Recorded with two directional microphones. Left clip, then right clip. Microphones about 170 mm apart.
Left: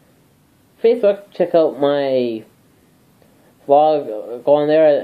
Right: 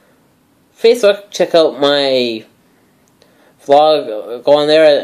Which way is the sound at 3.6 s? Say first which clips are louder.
Right 4 dB; 35° right (ahead or behind).